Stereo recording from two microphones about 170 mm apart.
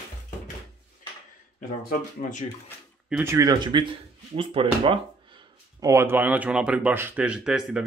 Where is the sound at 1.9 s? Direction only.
45° left (ahead or behind).